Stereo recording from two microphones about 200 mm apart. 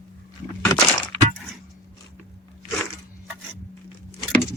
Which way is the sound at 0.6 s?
10° left (ahead or behind).